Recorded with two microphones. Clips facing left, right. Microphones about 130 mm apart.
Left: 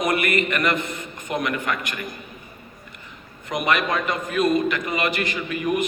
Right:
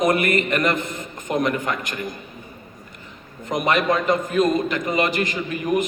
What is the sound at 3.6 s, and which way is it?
A man's voice, 40° right (ahead or behind).